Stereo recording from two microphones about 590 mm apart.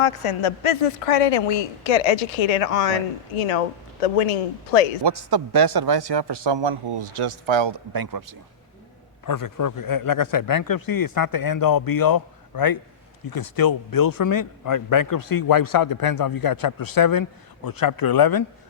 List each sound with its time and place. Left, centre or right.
0.0 s a woman's voice: left
3.3 s speech: left
4.0 s speech: left
5.0 s a man's voice: right
9.2 s a man's voice: left